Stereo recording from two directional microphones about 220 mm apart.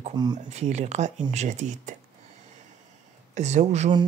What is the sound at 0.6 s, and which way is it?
A man's voice, 30° right (ahead or behind).